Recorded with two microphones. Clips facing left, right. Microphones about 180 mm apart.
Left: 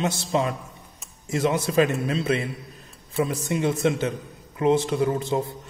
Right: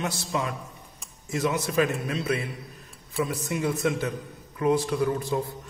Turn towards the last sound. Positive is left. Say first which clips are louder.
# left 2 dB
turn(degrees=25)  # may be behind; listen again after turning